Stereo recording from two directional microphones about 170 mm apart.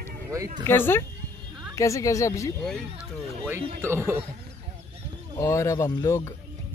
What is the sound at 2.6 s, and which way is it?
Speech, centre (ahead or behind).